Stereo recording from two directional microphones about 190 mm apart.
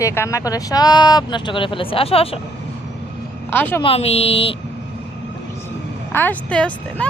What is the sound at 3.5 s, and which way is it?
Speech, 10° left (ahead or behind).